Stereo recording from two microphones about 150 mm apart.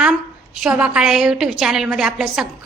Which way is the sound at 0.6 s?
10° right (ahead or behind).